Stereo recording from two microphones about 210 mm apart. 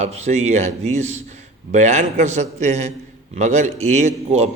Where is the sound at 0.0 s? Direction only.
30° right (ahead or behind).